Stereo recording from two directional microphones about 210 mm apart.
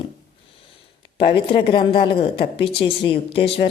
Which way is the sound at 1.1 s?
25° left (ahead or behind).